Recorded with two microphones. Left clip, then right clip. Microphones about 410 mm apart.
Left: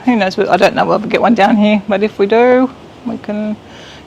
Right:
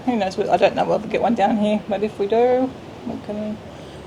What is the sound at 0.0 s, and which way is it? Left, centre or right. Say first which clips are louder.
Speech: left 8 dB; left.